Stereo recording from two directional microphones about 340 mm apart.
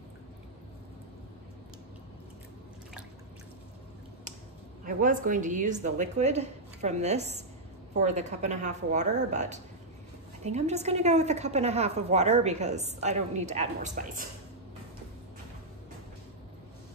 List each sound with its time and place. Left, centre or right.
4.8 s a woman's voice: right